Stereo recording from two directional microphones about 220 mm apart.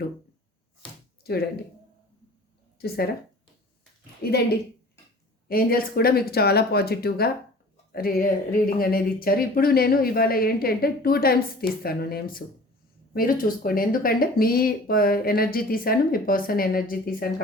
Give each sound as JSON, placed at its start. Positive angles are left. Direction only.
{"t": 1.2, "sound": "speech", "side_deg": 45}
{"t": 2.7, "sound": "speech", "side_deg": 45}
{"t": 4.2, "sound": "speech", "side_deg": 45}